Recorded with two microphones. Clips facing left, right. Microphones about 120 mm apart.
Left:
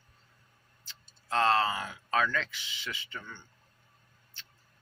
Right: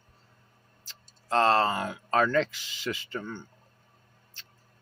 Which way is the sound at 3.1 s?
45° right (ahead or behind).